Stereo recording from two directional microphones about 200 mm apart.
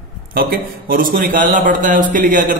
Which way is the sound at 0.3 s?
45° right (ahead or behind).